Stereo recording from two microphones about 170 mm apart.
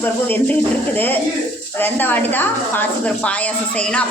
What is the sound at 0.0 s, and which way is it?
A woman's voice, 10° left (ahead or behind).